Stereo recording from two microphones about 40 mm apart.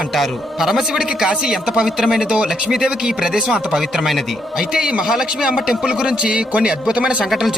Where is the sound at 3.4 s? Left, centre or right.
Right.